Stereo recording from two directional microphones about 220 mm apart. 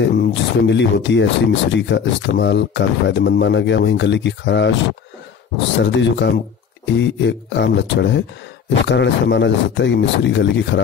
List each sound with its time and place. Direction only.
0.2 s speech: 55° left (ahead or behind)
5.9 s speech: 55° left (ahead or behind)